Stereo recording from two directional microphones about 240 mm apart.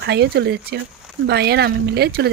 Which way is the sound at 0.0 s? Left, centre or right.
Right.